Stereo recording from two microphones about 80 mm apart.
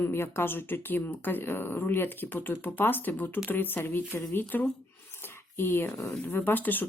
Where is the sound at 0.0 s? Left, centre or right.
Left.